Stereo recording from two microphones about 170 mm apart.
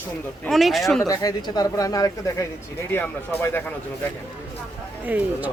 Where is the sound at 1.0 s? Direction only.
20° left (ahead or behind).